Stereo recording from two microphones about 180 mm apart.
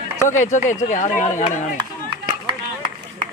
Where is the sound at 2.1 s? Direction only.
25° right (ahead or behind).